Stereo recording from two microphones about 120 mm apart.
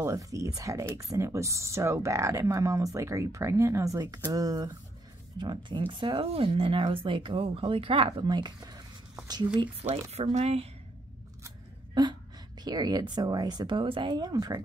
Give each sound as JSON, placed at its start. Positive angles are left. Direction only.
{"t": 0.0, "sound": "speech", "side_deg": -25}
{"t": 10.1, "sound": "speech", "side_deg": -60}
{"t": 11.9, "sound": "a sound", "side_deg": -40}
{"t": 12.6, "sound": "speech", "side_deg": -35}